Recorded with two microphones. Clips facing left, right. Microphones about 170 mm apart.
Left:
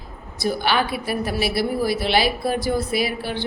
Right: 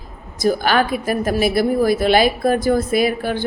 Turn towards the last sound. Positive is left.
turn(degrees=-50)  # may be behind; listen again after turning